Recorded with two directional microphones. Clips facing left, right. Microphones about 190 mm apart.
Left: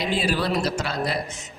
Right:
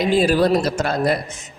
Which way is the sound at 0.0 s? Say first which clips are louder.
Right 8 dB; 45° right (ahead or behind).